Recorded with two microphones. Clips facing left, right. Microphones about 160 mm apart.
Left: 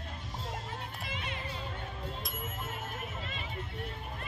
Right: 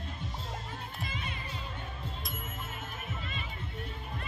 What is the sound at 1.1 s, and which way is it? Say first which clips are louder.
Music: left 3 dB; 80° left.